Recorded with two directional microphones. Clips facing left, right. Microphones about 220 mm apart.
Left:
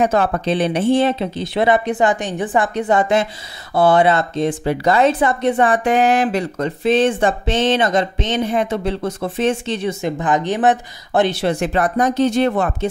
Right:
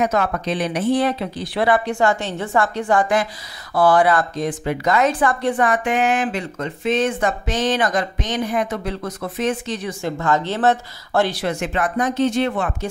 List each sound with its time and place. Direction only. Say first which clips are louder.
0.0 s speech: left 3 dB; 30° left (ahead or behind)